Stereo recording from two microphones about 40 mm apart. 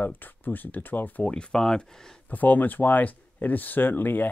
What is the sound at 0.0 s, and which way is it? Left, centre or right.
Speech, left.